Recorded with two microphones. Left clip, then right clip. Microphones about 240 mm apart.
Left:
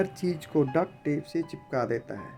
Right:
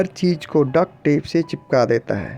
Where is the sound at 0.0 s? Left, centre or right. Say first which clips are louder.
Right 9 dB; right.